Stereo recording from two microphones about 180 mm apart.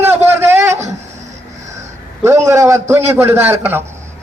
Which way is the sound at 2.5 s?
15° right (ahead or behind).